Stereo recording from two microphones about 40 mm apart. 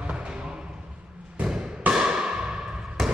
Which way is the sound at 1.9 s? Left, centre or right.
Centre.